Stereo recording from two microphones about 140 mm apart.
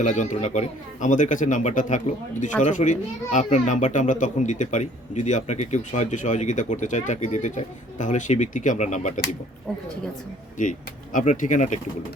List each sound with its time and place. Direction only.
0.0 s a child's voice: 60° left (ahead or behind)
10.6 s a child's voice: 60° left (ahead or behind)